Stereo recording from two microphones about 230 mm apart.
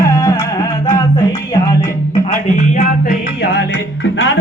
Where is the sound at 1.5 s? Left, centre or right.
Centre.